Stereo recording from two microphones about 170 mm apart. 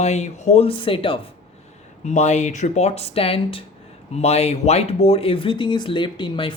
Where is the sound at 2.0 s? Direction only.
40° left (ahead or behind).